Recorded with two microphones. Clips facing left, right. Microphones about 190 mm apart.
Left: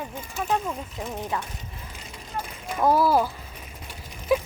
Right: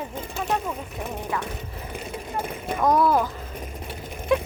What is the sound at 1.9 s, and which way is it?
Vehicle, 60° right (ahead or behind).